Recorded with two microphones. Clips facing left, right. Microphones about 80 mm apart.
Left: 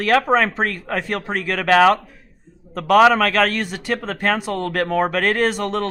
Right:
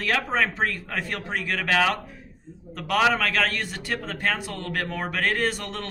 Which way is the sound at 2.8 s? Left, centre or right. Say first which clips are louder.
Left 9 dB; left.